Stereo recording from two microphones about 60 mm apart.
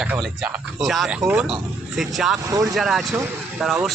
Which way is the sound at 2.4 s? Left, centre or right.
Right.